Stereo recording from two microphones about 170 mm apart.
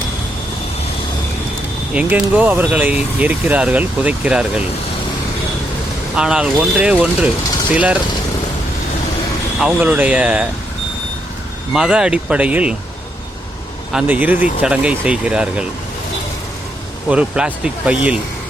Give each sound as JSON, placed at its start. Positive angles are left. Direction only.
{"t": 1.9, "sound": "speech", "side_deg": -5}
{"t": 6.1, "sound": "speech", "side_deg": -5}
{"t": 9.6, "sound": "speech", "side_deg": -10}
{"t": 11.7, "sound": "speech", "side_deg": -5}
{"t": 13.9, "sound": "speech", "side_deg": -10}
{"t": 17.1, "sound": "speech", "side_deg": -5}